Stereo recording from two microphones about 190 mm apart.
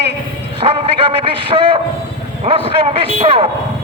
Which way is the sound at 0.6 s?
30° right (ahead or behind).